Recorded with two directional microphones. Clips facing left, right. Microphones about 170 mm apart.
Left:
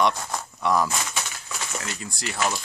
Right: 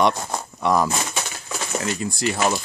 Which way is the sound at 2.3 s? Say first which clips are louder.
Right 3 dB; 45° right (ahead or behind).